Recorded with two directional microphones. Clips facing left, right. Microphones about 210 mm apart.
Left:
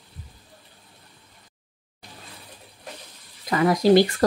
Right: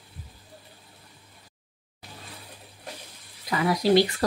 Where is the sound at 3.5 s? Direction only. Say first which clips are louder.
Left 4 dB; 50° left (ahead or behind).